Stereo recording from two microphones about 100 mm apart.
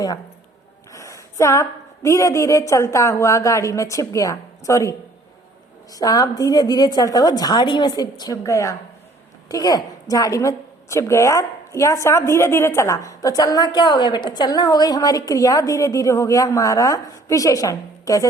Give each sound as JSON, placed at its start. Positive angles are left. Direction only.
{"t": 0.9, "sound": "a woman's voice", "side_deg": 30}